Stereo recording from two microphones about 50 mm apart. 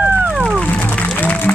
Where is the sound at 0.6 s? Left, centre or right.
Left.